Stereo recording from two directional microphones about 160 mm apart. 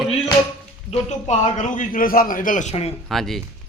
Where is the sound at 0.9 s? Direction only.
45° left (ahead or behind).